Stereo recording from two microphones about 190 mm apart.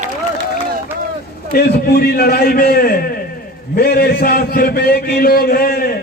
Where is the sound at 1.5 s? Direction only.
55° left (ahead or behind).